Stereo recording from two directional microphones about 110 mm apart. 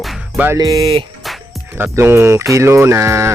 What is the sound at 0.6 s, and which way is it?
Speech, 40° right (ahead or behind).